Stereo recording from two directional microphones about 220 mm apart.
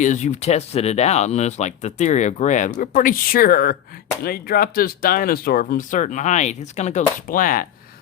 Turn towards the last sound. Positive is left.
turn(degrees=40)  # may be behind; listen again after turning